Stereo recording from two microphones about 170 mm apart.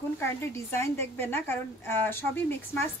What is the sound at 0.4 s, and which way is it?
A woman's voice, 15° left (ahead or behind).